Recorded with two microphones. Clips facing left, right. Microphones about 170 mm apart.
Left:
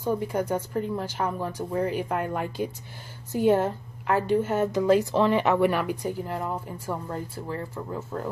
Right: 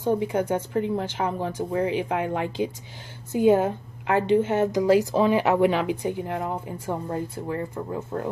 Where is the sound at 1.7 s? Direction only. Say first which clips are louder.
Right 2 dB; centre (ahead or behind).